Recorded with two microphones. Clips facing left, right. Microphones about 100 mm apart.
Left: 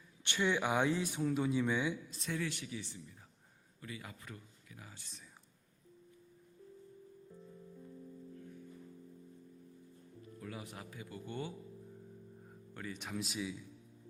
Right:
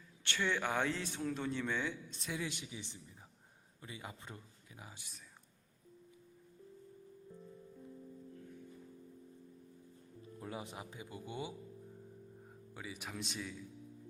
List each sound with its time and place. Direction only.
0.3 s speech: 15° left (ahead or behind)
2.1 s a man's voice: centre (ahead or behind)
2.4 s speech: 20° right (ahead or behind)
10.4 s speech: 25° right (ahead or behind); by 13.6 s 5° left (ahead or behind)